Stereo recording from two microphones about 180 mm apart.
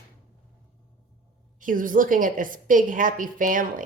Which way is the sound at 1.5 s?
50° right (ahead or behind).